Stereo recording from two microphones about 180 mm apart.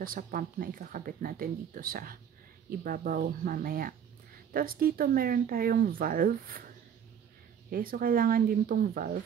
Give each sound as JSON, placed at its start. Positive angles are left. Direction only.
{"t": 0.0, "sound": "speech", "side_deg": -50}
{"t": 7.7, "sound": "speech", "side_deg": -55}